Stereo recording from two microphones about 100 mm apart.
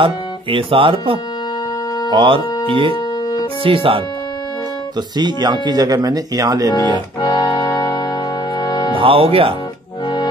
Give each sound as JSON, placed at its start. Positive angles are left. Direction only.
{"t": 0.0, "sound": "speech", "side_deg": -60}
{"t": 5.1, "sound": "speech", "side_deg": -45}
{"t": 7.2, "sound": "music", "side_deg": 45}
{"t": 8.9, "sound": "speech", "side_deg": -65}